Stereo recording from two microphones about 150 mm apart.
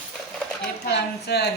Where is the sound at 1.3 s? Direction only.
90° left.